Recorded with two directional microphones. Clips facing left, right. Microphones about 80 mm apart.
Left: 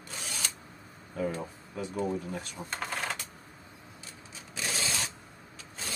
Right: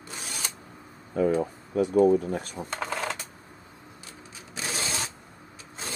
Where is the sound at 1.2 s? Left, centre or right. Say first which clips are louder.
Right 10 dB; right.